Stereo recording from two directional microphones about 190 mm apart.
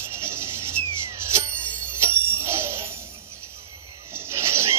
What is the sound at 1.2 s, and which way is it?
Music, 15° right (ahead or behind).